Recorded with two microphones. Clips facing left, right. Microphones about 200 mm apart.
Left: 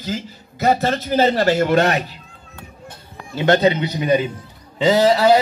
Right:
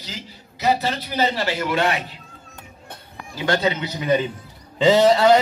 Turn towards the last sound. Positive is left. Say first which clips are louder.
# left 1 dB
turn(degrees=5)  # may be behind; listen again after turning